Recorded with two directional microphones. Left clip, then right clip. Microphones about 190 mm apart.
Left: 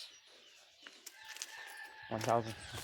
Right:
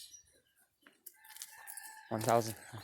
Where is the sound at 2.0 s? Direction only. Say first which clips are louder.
Right 3 dB; 50° right (ahead or behind).